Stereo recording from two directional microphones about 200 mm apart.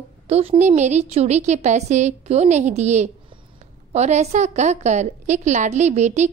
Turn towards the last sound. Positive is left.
turn(degrees=-35)  # may be behind; listen again after turning